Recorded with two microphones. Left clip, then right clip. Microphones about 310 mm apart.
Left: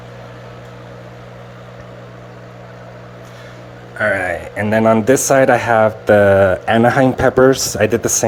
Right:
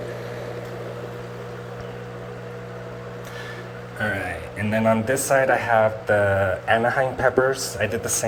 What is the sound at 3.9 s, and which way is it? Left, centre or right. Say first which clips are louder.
Speech: left 10 dB; centre.